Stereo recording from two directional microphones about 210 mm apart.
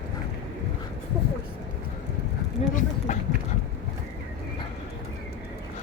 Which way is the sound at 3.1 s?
35° left (ahead or behind).